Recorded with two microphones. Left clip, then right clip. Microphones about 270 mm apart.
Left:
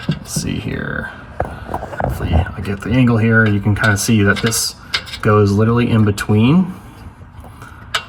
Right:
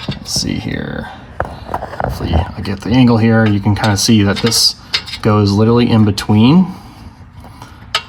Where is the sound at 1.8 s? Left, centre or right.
Left.